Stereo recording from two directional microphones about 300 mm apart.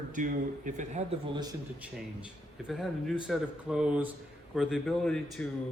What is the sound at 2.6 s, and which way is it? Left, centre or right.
A man's voice, centre.